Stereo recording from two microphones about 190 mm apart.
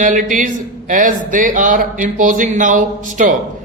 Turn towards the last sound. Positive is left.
turn(degrees=-40)  # may be behind; listen again after turning